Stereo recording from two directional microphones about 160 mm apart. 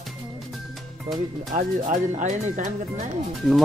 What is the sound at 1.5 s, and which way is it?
Speech, 50° right (ahead or behind).